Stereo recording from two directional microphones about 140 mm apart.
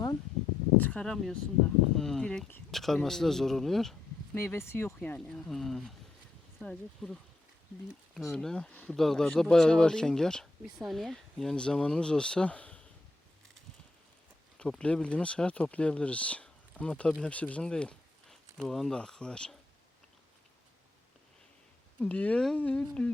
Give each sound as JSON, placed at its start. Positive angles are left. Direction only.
{"t": 0.8, "sound": "speech", "side_deg": 10}
{"t": 4.4, "sound": "speech", "side_deg": 20}
{"t": 14.6, "sound": "speech", "side_deg": 5}
{"t": 22.0, "sound": "speech", "side_deg": 10}